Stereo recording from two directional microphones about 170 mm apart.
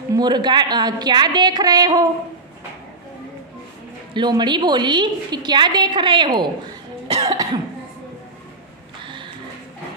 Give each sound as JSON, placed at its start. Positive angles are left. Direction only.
{"t": 0.1, "sound": "a woman's voice", "side_deg": -25}
{"t": 4.1, "sound": "a woman's voice", "side_deg": -25}
{"t": 7.2, "sound": "cough", "side_deg": -20}
{"t": 9.0, "sound": "a sound", "side_deg": -30}